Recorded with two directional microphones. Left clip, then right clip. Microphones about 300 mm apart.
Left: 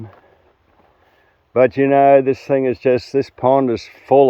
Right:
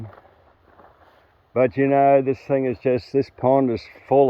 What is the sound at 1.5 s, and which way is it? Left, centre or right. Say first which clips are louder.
Speech: left 5 dB; centre.